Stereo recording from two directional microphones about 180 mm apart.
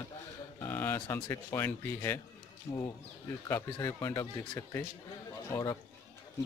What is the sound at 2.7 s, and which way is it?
Speech, 25° left (ahead or behind).